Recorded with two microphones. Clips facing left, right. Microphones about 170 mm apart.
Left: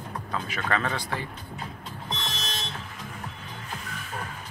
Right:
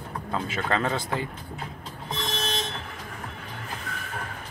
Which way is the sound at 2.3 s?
55° right (ahead or behind).